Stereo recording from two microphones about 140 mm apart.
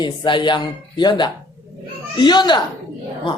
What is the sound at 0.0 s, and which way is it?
A man's voice, 35° left (ahead or behind).